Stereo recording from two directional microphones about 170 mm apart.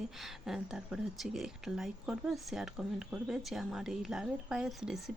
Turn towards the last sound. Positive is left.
turn(degrees=-5)  # may be behind; listen again after turning